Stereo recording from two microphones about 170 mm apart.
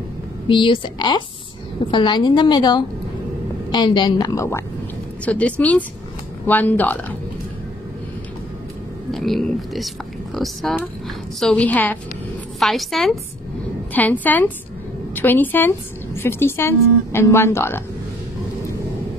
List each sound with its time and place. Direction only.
0.5 s a woman's voice: 30° left (ahead or behind); by 7.2 s 10° left (ahead or behind)
9.1 s a woman's voice: centre (ahead or behind)